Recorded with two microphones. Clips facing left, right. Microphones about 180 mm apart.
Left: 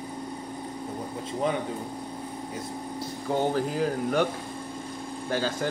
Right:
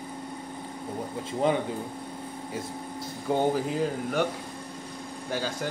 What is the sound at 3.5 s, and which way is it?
Speech, centre (ahead or behind).